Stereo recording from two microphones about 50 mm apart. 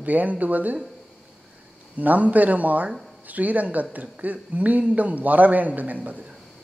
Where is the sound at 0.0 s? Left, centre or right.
Right.